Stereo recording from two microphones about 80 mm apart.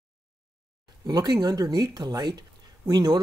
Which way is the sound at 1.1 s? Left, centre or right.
Right.